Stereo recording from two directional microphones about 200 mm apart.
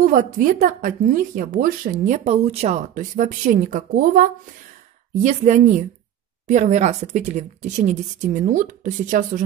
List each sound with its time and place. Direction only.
0.0 s speech: 40° right (ahead or behind)